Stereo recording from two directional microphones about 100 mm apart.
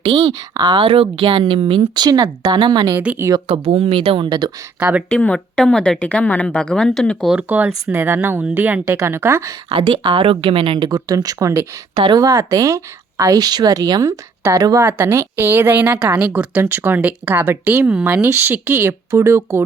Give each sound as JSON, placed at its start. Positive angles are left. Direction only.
{"t": 0.0, "sound": "speech", "side_deg": -70}
{"t": 0.5, "sound": "speech", "side_deg": -45}
{"t": 1.8, "sound": "speech", "side_deg": -40}
{"t": 3.5, "sound": "speech", "side_deg": -80}
{"t": 4.3, "sound": "speech", "side_deg": -45}
{"t": 4.8, "sound": "speech", "side_deg": -10}
{"t": 5.0, "sound": "a woman's voice", "side_deg": 10}
{"t": 7.3, "sound": "a woman's voice", "side_deg": -15}
{"t": 8.8, "sound": "a woman's voice", "side_deg": -30}
{"t": 9.6, "sound": "speech", "side_deg": -55}
{"t": 10.8, "sound": "speech", "side_deg": -40}
{"t": 11.9, "sound": "speech", "side_deg": -45}
{"t": 14.8, "sound": "a woman's voice", "side_deg": -25}